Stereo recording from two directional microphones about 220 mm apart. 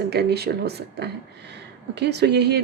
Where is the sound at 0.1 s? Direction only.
45° right (ahead or behind).